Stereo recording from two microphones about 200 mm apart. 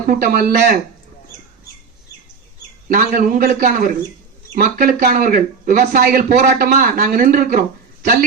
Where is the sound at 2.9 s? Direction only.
45° right (ahead or behind).